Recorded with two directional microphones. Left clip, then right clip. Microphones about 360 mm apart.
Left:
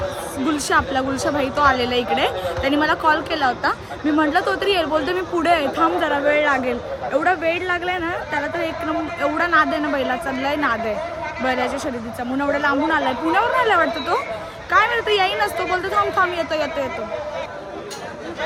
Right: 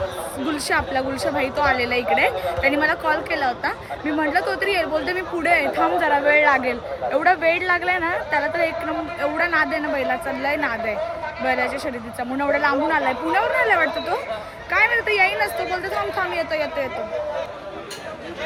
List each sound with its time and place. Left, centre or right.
0.4 s speech: centre